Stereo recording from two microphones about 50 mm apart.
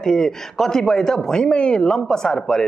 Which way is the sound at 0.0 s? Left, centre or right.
Centre.